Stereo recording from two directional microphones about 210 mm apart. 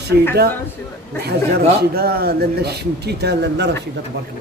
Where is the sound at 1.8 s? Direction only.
45° right (ahead or behind).